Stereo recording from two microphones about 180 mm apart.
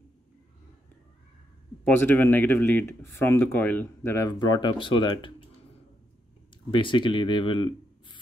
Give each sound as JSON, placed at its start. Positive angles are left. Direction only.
{"t": 1.9, "sound": "speech", "side_deg": 10}
{"t": 6.7, "sound": "speech", "side_deg": 25}